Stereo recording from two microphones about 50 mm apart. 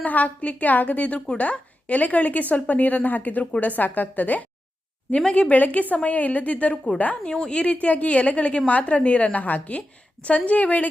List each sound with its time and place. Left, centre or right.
0.0 s a woman's voice: left